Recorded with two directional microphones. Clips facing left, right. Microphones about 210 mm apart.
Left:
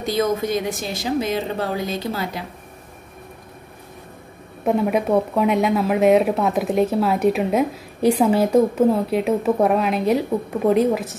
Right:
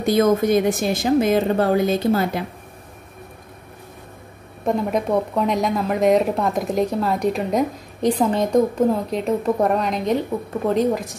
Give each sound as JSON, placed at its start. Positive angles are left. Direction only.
{"t": 0.0, "sound": "a woman's voice", "side_deg": -50}
{"t": 4.6, "sound": "speech", "side_deg": 5}